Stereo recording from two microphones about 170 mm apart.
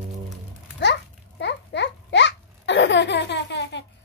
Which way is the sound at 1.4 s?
90° left.